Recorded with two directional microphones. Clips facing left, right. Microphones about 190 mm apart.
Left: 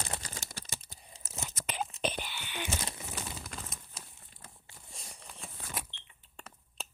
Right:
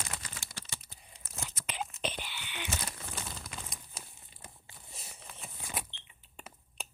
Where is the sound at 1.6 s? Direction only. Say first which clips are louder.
Left 3 dB; 45° left (ahead or behind).